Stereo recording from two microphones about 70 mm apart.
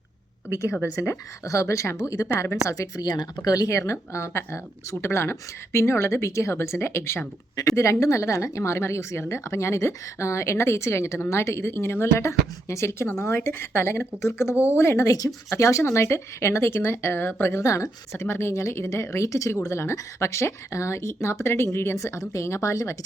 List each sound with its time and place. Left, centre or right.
0.9 s a woman's voice: left
3.4 s a woman's voice: left
7.8 s a woman's voice: left
12.3 s a woman's voice: left
15.1 s a woman's voice: left
17.6 s a woman's voice: left